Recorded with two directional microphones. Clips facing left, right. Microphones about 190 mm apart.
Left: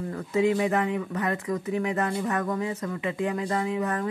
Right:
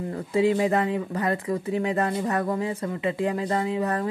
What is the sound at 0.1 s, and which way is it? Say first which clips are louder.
Speech: right 2 dB; 30° right (ahead or behind).